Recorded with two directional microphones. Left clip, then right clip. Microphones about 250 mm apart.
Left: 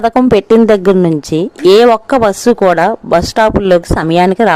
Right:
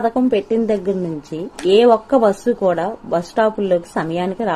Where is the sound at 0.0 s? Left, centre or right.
Left.